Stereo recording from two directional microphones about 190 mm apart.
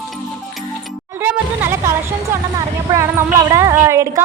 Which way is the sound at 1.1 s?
10° right (ahead or behind).